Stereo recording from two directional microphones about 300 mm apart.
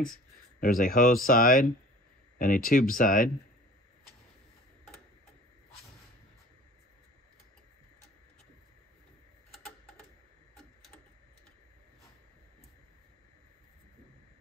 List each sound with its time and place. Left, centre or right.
0.6 s speech: left